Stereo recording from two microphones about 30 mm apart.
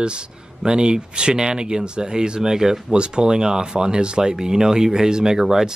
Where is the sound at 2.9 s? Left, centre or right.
Right.